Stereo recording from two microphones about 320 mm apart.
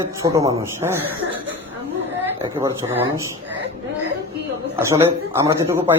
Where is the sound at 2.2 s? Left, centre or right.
Centre.